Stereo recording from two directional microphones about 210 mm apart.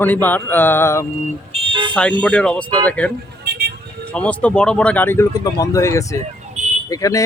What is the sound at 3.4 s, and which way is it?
Vehicle, 50° right (ahead or behind).